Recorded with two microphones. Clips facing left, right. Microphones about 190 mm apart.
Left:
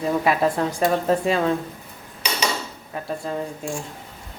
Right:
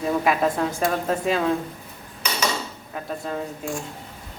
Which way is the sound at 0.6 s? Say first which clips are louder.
Left 2 dB; centre (ahead or behind).